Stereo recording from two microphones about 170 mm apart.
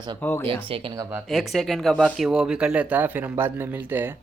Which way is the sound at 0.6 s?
30° right (ahead or behind).